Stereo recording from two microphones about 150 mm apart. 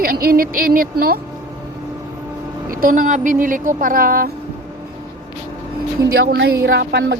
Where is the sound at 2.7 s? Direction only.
70° right (ahead or behind).